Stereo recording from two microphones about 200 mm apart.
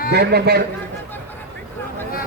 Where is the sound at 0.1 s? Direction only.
55° right (ahead or behind).